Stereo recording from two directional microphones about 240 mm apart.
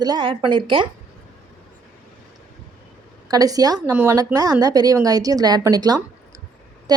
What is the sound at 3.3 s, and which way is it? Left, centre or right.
A woman's voice, centre.